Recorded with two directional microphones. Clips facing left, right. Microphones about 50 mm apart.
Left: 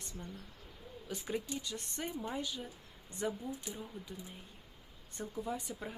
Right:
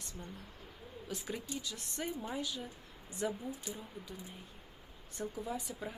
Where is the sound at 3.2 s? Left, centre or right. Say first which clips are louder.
Even; centre.